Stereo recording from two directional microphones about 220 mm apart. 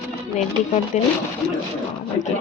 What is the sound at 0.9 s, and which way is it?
Speech, 35° left (ahead or behind).